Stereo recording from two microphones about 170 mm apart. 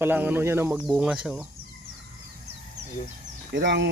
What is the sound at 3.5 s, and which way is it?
Speech, 90° right.